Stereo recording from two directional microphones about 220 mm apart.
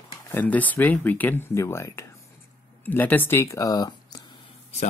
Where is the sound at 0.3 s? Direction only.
10° left (ahead or behind).